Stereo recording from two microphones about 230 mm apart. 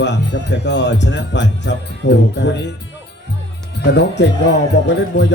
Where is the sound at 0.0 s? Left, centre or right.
Left.